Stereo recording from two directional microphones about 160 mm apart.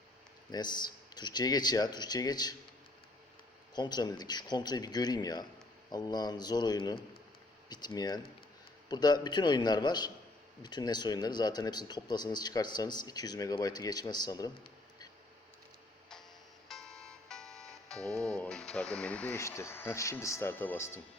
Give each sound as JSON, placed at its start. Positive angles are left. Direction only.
{"t": 0.5, "sound": "speech", "side_deg": 25}
{"t": 3.8, "sound": "speech", "side_deg": 25}
{"t": 16.6, "sound": "music", "side_deg": 5}